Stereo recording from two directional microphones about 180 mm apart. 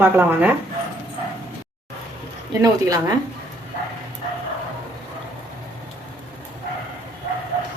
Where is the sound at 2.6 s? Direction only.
20° right (ahead or behind).